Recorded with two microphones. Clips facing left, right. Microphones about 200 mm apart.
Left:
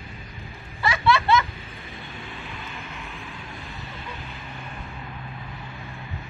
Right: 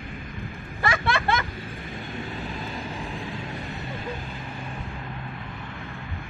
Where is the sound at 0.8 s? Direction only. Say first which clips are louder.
Left 4 dB; 50° right (ahead or behind).